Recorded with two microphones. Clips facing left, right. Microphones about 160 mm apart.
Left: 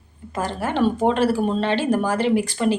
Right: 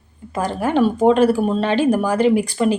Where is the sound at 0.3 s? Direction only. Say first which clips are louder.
Right 4 dB; 15° right (ahead or behind).